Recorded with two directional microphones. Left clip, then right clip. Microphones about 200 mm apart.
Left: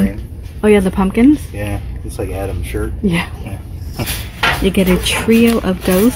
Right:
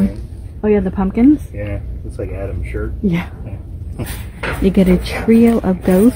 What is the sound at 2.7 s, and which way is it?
Speech, 25° left (ahead or behind).